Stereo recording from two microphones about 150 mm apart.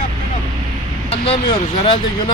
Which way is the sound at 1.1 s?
40° left (ahead or behind).